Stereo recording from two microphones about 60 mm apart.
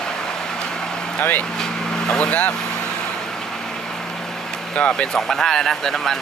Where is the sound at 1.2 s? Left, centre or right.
Left.